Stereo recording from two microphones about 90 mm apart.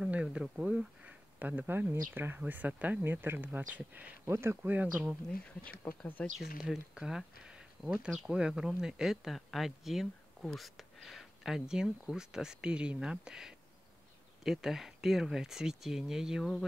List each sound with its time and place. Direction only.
0.0 s speech: 10° right (ahead or behind)
4.3 s speech: 30° right (ahead or behind)
4.8 s speech: 10° right (ahead or behind)
5.9 s speech: 20° left (ahead or behind)
6.3 s speech: 5° right (ahead or behind)